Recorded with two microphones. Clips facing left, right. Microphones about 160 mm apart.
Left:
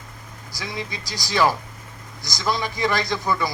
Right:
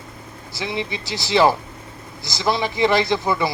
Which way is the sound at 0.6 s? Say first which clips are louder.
Right 5 dB; 25° right (ahead or behind).